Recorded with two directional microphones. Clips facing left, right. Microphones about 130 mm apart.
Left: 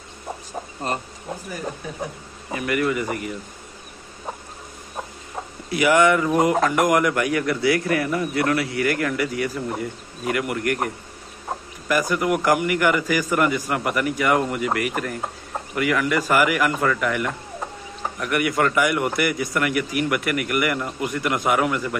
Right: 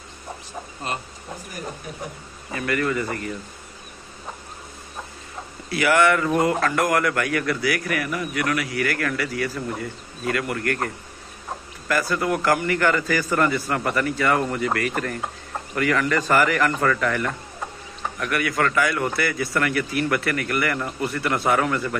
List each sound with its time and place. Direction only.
2.5 s a man's voice: 15° left (ahead or behind)
5.7 s speech: 20° left (ahead or behind)
11.9 s a man's voice: 15° left (ahead or behind)